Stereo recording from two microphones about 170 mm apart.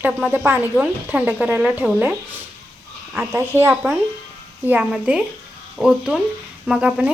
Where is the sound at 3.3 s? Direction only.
15° right (ahead or behind).